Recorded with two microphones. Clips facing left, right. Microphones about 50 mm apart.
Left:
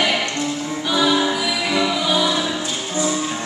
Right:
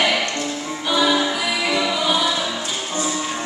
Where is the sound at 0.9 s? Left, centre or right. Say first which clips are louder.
Even; centre.